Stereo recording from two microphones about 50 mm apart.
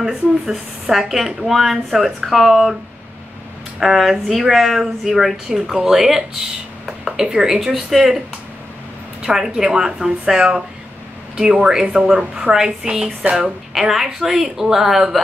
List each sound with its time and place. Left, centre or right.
0.0 s speech: centre
3.8 s a woman's voice: centre
6.9 s a sound: centre
7.2 s a woman's voice: centre
9.2 s a woman's voice: centre
13.4 s a woman's voice: centre